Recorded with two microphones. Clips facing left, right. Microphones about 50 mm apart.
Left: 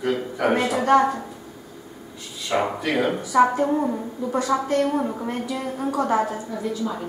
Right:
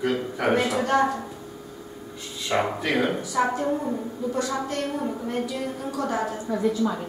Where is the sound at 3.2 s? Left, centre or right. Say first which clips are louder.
Left 6 dB; centre.